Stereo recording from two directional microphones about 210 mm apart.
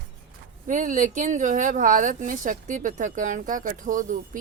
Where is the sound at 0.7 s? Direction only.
35° right (ahead or behind).